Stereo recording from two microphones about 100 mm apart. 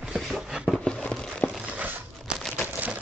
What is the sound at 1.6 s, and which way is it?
Crumpling, 15° right (ahead or behind).